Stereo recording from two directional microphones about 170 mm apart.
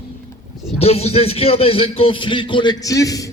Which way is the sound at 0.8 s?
35° left (ahead or behind).